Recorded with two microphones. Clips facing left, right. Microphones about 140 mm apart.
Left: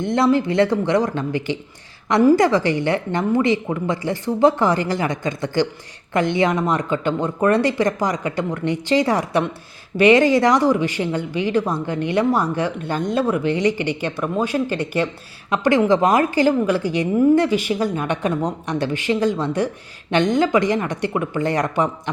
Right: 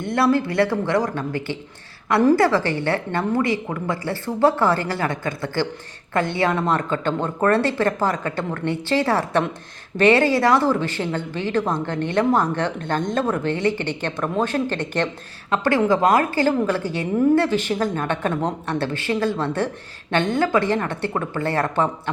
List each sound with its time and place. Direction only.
0.0 s speech: 20° left (ahead or behind)